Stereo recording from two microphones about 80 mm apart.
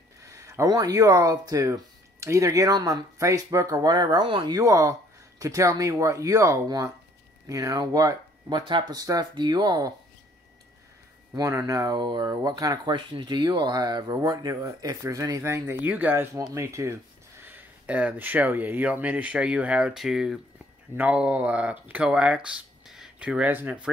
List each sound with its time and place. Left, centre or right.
0.2 s a sound: right
0.7 s speech: right
4.6 s speech: right
8.9 s speech: right
9.3 s speech: right
11.3 s speech: right
11.9 s speech: right
12.3 s speech: right
12.9 s speech: right
15.8 s speech: right
16.5 s speech: right
17.4 s speech: right; by 20.3 s centre
20.9 s speech: centre